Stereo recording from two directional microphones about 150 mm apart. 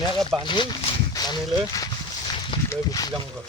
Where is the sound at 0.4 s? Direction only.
30° left (ahead or behind).